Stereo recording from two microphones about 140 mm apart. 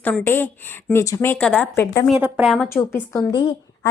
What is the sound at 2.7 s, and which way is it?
Speech, 20° left (ahead or behind).